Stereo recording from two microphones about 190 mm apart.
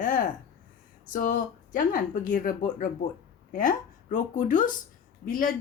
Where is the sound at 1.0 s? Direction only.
45° left (ahead or behind).